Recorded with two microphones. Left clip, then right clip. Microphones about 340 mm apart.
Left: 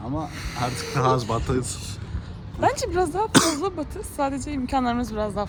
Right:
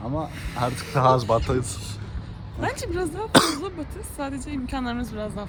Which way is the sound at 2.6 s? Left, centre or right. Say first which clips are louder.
Left 6 dB; centre.